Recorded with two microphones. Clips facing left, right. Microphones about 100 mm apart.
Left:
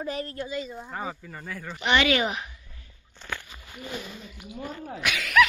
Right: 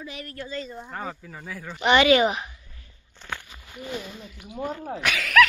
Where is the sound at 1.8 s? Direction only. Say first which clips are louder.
Right 5 dB; 25° right (ahead or behind).